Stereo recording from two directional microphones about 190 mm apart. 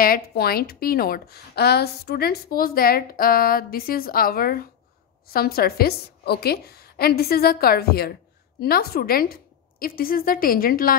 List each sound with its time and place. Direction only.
0.0 s a woman's voice: 50° left (ahead or behind)